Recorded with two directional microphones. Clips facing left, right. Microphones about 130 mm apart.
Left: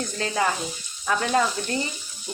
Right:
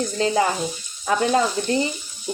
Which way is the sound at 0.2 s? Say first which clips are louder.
Right 5 dB; 30° right (ahead or behind).